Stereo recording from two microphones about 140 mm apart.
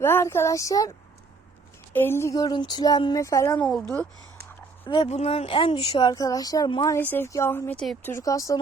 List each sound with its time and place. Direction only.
0.0 s speech: 15° left (ahead or behind)
3.6 s speech: 10° left (ahead or behind)
5.0 s speech: 50° left (ahead or behind); by 6.8 s 30° left (ahead or behind)
6.8 s speech: 15° left (ahead or behind)